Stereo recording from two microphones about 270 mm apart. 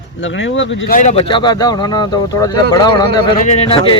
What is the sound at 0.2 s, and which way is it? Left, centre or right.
Speech, left.